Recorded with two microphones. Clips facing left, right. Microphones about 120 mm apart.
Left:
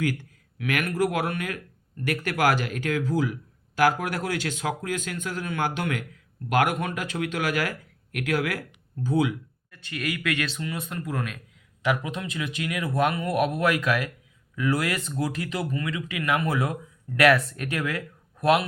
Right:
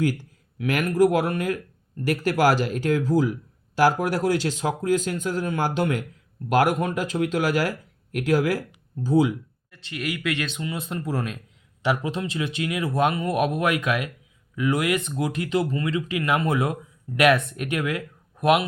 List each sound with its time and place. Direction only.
0.0 s speech: 35° right (ahead or behind)
9.7 s speech: 25° right (ahead or behind)